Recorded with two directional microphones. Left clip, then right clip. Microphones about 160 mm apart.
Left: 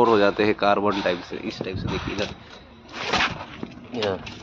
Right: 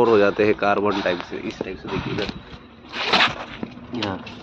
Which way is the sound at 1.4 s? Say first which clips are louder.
Right 1 dB; 10° left (ahead or behind).